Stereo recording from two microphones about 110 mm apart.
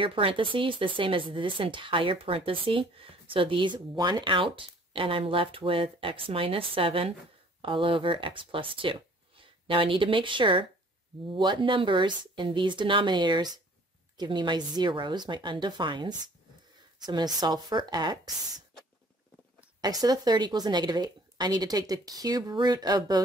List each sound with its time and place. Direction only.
0.0 s a woman's voice: 55° right (ahead or behind)
19.8 s a woman's voice: 35° right (ahead or behind)